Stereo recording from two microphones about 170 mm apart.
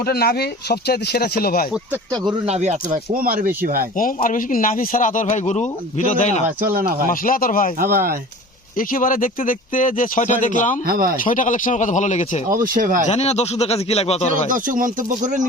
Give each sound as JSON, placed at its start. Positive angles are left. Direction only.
{"t": 0.0, "sound": "speech", "side_deg": 65}
{"t": 2.5, "sound": "speech", "side_deg": -45}
{"t": 3.9, "sound": "speech", "side_deg": 55}
{"t": 6.6, "sound": "speech", "side_deg": -55}
{"t": 7.1, "sound": "speech", "side_deg": 55}
{"t": 7.8, "sound": "speech", "side_deg": -60}
{"t": 8.8, "sound": "speech", "side_deg": 55}
{"t": 10.8, "sound": "speech", "side_deg": -60}
{"t": 11.2, "sound": "speech", "side_deg": 50}
{"t": 12.5, "sound": "speech", "side_deg": -55}
{"t": 13.1, "sound": "speech", "side_deg": 40}
{"t": 14.5, "sound": "speech", "side_deg": -50}